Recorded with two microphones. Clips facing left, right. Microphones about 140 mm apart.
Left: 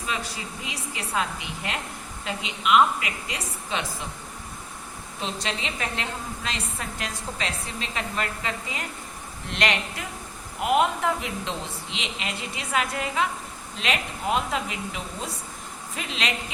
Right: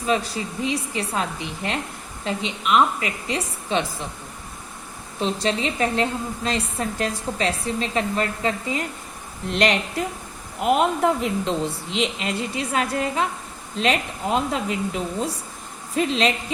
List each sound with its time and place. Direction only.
0.6 s a woman's voice: 30° right (ahead or behind)
5.2 s a woman's voice: 35° right (ahead or behind)